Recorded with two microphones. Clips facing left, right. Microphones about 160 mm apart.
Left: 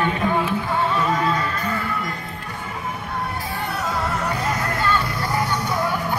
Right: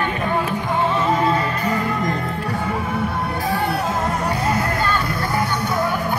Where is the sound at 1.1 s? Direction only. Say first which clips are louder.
Right 3 dB; 25° right (ahead or behind).